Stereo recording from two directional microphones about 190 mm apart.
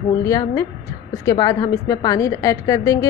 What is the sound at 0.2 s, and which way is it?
A woman's voice, 15° left (ahead or behind).